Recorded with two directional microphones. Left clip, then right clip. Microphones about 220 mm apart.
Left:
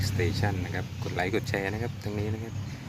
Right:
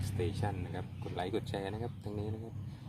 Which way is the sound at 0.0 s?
Centre (ahead or behind).